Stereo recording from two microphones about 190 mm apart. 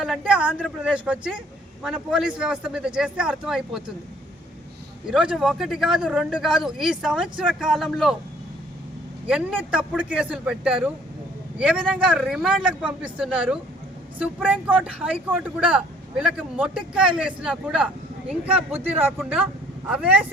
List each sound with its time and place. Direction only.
0.0 s speech: 5° right (ahead or behind)
5.0 s speech: 5° right (ahead or behind)
9.2 s speech: 5° right (ahead or behind)